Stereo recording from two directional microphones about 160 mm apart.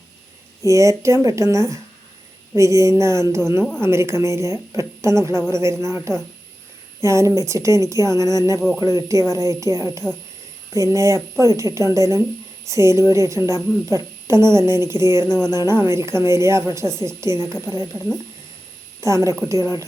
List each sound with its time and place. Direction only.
0.6 s a woman's voice: 20° right (ahead or behind)